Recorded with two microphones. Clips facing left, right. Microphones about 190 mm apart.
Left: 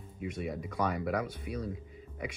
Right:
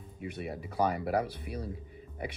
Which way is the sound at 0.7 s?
30° right (ahead or behind).